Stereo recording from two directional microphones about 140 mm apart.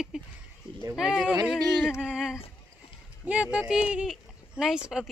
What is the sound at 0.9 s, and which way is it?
Speech, 5° right (ahead or behind).